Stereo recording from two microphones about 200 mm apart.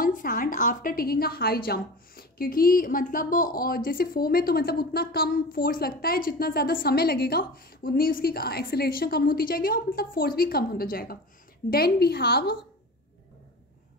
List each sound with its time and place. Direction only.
0.0 s a woman's voice: 45° left (ahead or behind)